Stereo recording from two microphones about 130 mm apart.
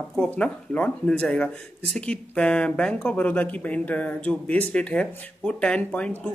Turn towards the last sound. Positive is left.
turn(degrees=10)  # may be behind; listen again after turning